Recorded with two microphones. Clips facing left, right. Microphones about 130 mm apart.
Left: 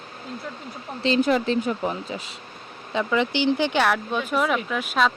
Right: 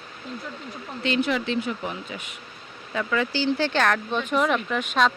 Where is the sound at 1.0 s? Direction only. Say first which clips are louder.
Left 4 dB; 35° left (ahead or behind).